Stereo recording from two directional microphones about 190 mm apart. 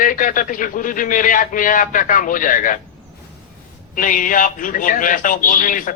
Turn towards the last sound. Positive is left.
turn(degrees=45)  # may be behind; listen again after turning